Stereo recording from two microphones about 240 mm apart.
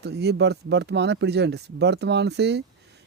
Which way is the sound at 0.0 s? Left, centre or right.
Right.